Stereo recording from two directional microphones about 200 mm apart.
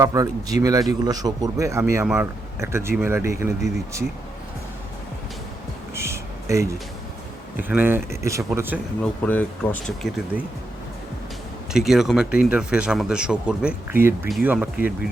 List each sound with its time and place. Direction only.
0.0 s speech: 15° right (ahead or behind)
5.9 s music: 15° right (ahead or behind)
7.7 s speech: 10° right (ahead or behind)
9.0 s speech: 10° left (ahead or behind)
10.3 s speech: 5° right (ahead or behind)
11.7 s speech: centre (ahead or behind)